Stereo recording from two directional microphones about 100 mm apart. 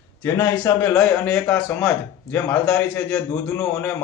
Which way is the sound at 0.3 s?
25° left (ahead or behind).